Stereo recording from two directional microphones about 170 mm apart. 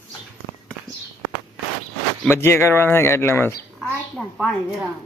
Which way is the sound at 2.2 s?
15° left (ahead or behind).